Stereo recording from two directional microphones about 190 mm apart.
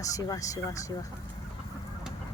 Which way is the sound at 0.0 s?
20° left (ahead or behind).